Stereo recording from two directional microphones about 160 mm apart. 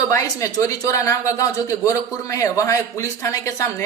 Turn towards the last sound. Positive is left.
turn(degrees=20)  # may be behind; listen again after turning